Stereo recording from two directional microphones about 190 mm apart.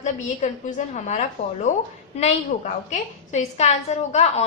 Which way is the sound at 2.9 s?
35° left (ahead or behind).